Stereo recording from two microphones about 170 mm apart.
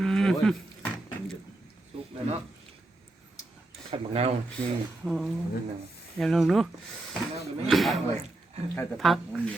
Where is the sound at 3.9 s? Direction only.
35° right (ahead or behind).